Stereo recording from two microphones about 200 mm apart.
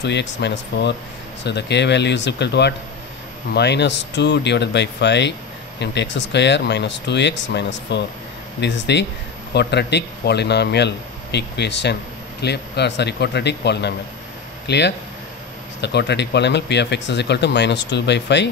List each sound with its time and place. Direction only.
0.0 s speech: 60° left (ahead or behind)